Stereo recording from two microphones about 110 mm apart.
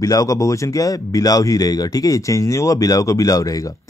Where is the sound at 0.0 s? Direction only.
30° left (ahead or behind).